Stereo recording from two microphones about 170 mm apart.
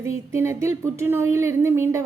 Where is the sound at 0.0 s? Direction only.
15° right (ahead or behind).